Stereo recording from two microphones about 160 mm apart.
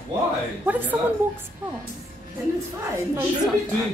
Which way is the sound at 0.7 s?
10° right (ahead or behind).